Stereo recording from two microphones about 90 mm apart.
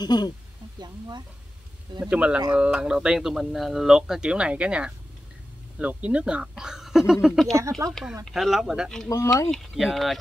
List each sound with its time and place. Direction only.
0.0 s speech: 50° left (ahead or behind)
0.7 s speech: 50° right (ahead or behind)
2.0 s speech: 10° right (ahead or behind)
7.5 s speech: 35° right (ahead or behind)
7.9 s speech: 5° right (ahead or behind)